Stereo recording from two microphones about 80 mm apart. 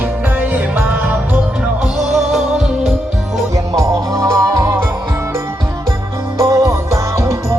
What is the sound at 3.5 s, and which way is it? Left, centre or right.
Music, right.